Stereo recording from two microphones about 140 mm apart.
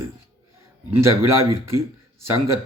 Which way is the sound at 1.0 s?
20° right (ahead or behind).